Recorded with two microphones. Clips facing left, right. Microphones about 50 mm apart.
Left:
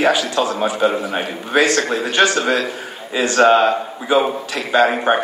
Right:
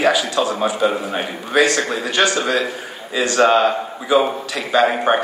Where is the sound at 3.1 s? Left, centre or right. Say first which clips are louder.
Left 2 dB; left.